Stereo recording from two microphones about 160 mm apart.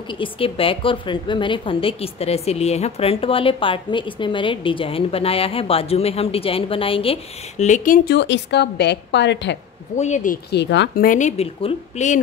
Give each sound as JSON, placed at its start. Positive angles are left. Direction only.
{"t": 0.2, "sound": "a woman's voice", "side_deg": 35}
{"t": 7.6, "sound": "a woman's voice", "side_deg": 55}
{"t": 9.9, "sound": "speech", "side_deg": 50}